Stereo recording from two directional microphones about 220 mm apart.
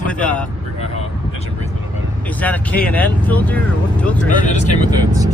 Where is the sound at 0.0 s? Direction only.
5° left (ahead or behind).